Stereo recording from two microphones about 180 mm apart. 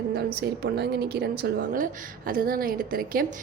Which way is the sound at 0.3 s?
60° right (ahead or behind).